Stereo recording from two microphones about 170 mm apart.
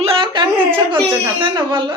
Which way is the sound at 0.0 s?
30° right (ahead or behind).